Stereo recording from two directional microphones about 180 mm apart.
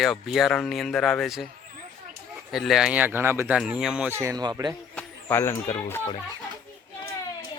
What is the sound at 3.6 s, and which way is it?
Speech, 5° right (ahead or behind).